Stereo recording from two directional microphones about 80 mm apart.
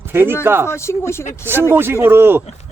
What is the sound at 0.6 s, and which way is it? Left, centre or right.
Speech, left.